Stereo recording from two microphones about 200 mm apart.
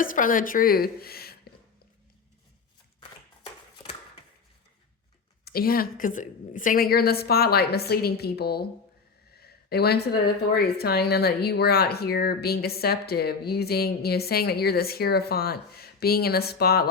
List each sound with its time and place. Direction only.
0.0 s a woman's voice: 45° left (ahead or behind)
5.5 s speech: 50° left (ahead or behind)